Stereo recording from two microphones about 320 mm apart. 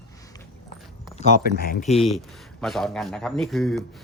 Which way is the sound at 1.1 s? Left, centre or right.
Left.